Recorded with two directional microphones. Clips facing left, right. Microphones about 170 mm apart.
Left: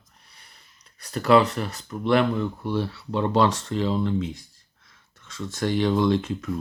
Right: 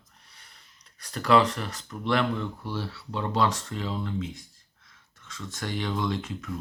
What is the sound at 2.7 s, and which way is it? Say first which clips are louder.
Speech: left 9 dB; 55° left (ahead or behind).